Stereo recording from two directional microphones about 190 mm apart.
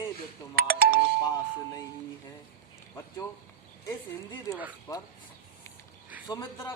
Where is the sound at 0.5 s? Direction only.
50° right (ahead or behind).